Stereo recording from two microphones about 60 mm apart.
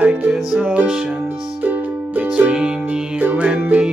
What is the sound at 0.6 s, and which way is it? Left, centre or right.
Music, right.